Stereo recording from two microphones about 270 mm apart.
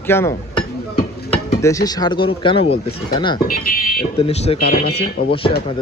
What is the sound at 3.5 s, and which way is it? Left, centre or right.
Speech, left.